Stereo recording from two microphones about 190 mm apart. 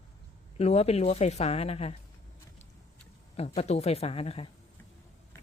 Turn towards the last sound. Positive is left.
turn(degrees=30)  # may be behind; listen again after turning